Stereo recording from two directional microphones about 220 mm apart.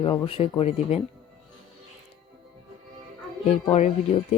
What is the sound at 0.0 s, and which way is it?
Speech, 20° left (ahead or behind).